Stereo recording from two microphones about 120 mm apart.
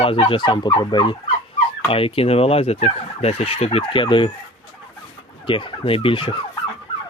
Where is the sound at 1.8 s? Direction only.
50° left (ahead or behind).